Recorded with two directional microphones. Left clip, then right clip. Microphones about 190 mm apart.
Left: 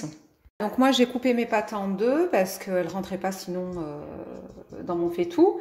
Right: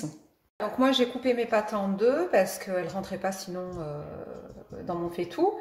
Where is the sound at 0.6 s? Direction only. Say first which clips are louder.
Left 3 dB; 40° left (ahead or behind).